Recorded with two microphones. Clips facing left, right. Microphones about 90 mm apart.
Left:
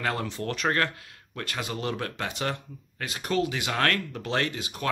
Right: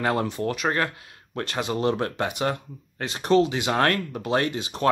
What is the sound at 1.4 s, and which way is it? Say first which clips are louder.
Speech: right 7 dB; 25° right (ahead or behind).